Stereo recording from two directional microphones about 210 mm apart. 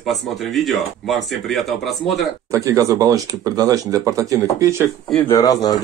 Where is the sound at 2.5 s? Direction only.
15° right (ahead or behind).